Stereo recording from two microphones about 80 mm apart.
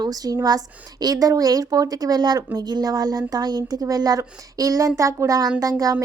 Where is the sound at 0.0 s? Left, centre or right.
Right.